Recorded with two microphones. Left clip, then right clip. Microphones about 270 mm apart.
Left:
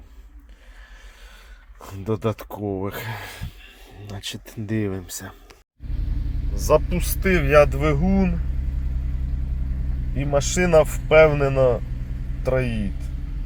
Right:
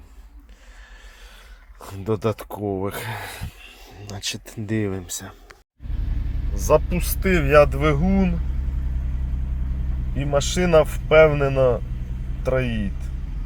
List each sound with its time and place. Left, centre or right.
1.8 s speech: centre
4.1 s speech: centre
6.6 s speech: centre
10.2 s speech: centre